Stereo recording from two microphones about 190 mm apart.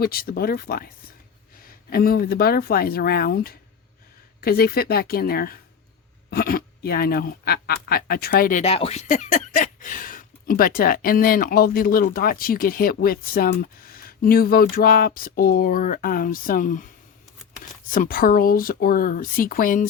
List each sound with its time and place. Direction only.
0.0 s speech: 50° left (ahead or behind)
8.6 s speech: 30° left (ahead or behind)
17.9 s speech: 50° left (ahead or behind)